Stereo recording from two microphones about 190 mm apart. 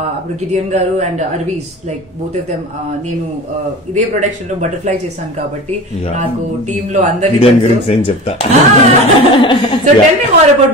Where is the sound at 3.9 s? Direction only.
40° right (ahead or behind).